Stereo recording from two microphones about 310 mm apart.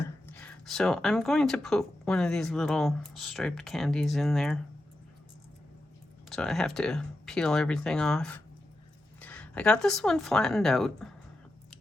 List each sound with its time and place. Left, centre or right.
0.3 s speech: centre
6.2 s speech: centre